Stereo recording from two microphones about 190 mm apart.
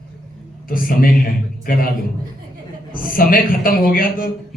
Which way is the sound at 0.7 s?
45° left (ahead or behind).